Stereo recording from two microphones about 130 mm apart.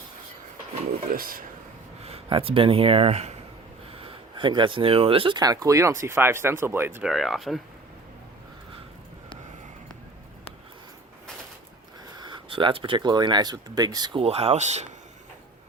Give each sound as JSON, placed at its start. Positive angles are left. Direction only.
{"t": 1.1, "sound": "speech", "side_deg": -90}
{"t": 2.0, "sound": "speech", "side_deg": -50}
{"t": 3.9, "sound": "speech", "side_deg": -40}
{"t": 5.4, "sound": "speech", "side_deg": -30}
{"t": 7.0, "sound": "speech", "side_deg": 0}
{"t": 12.2, "sound": "speech", "side_deg": -40}